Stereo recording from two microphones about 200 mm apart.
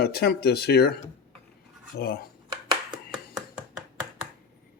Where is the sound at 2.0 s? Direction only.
50° left (ahead or behind).